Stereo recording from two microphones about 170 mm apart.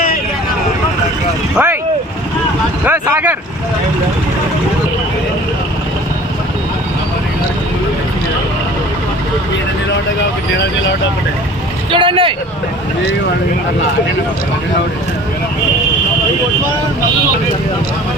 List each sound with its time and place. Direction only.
1.5 s vehicle: 10° right (ahead or behind)
2.8 s a sound: 10° right (ahead or behind)
11.9 s speech: 30° right (ahead or behind)